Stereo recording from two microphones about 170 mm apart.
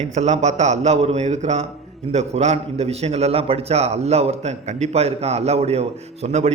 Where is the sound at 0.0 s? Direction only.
40° right (ahead or behind).